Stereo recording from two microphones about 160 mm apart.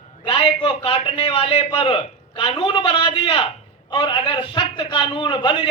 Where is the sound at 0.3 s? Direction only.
35° left (ahead or behind).